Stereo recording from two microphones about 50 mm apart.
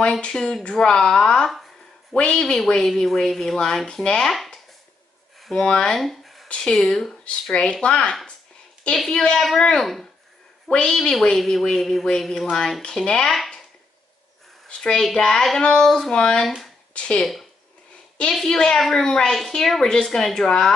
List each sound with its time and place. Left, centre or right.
0.2 s speech: centre
5.5 s speech: centre
5.9 s a sound: centre
6.5 s speech: centre
7.5 s speech: left; by 12.5 s centre
12.9 s speech: centre
13.3 s a sound: centre
14.7 s a child's voice: centre
16.4 s speech: centre
16.9 s speech: centre
17.2 s speech: centre